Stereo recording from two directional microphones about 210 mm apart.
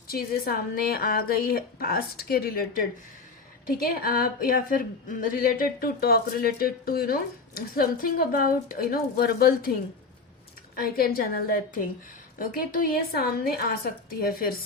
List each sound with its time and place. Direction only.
0.1 s a woman's voice: 45° left (ahead or behind)
10.8 s a woman's voice: 45° left (ahead or behind)